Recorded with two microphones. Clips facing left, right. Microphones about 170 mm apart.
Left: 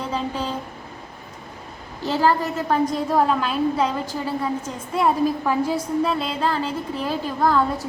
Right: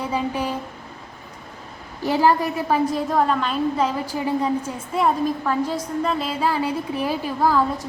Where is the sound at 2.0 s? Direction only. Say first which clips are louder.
Right 2 dB; 15° right (ahead or behind).